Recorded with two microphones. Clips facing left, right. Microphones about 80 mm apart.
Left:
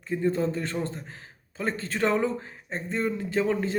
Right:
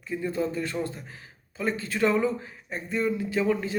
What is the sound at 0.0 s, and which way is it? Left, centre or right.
A man's voice, left.